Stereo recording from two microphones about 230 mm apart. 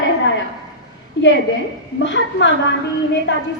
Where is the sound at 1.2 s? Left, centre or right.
Left.